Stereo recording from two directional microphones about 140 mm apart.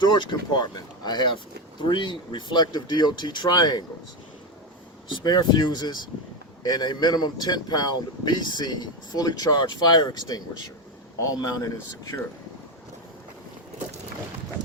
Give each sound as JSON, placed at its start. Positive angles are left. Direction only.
{"t": 0.0, "sound": "speech", "side_deg": 35}
{"t": 5.0, "sound": "speech", "side_deg": 35}